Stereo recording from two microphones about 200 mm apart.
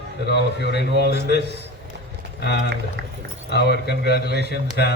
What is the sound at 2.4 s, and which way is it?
A man's voice, 55° left (ahead or behind).